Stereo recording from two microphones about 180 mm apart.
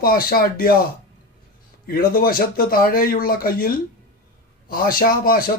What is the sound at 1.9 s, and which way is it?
Speech, 55° left (ahead or behind).